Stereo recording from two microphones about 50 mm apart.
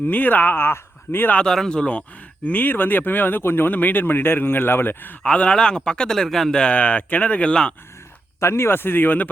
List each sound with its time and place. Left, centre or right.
0.0 s speech: left
1.5 s speech: centre; by 5.1 s left
5.2 s speech: left
6.6 s speech: left
8.4 s speech: left